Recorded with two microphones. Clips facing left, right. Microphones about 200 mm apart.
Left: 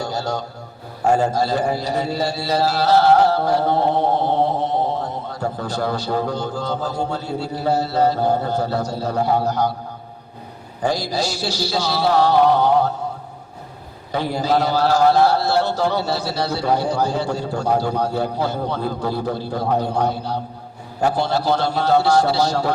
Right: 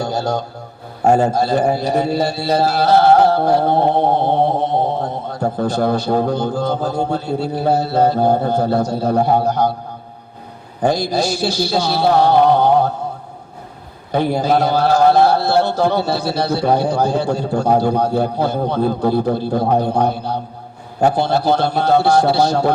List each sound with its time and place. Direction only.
0.0 s a sound: 55° right (ahead or behind)
1.0 s mantra: 50° right (ahead or behind)
10.8 s mantra: 55° right (ahead or behind)
14.1 s mantra: 55° right (ahead or behind)